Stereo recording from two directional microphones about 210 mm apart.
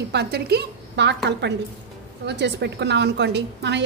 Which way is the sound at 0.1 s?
50° right (ahead or behind).